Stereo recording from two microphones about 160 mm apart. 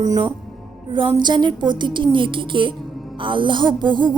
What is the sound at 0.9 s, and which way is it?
A woman's voice, 30° right (ahead or behind).